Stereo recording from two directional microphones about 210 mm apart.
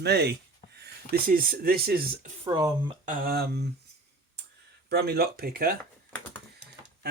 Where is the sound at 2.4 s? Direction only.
20° right (ahead or behind).